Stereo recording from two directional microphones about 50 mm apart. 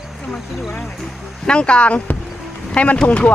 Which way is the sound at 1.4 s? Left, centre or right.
Centre.